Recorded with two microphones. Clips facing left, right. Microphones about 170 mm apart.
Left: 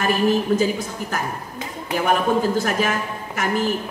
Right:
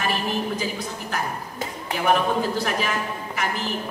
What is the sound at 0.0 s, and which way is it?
A woman's voice, 45° left (ahead or behind).